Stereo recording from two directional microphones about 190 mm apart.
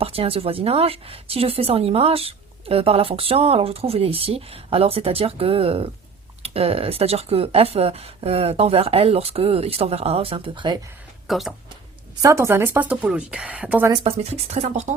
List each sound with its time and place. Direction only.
0.0 s speech: 30° right (ahead or behind)
11.3 s speech: centre (ahead or behind)
12.2 s speech: 15° right (ahead or behind)
14.5 s speech: 35° right (ahead or behind)